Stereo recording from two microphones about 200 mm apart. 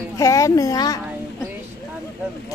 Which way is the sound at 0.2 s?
15° left (ahead or behind).